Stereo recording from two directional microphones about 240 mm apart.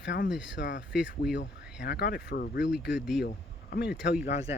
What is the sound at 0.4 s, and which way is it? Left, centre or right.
Speech, left.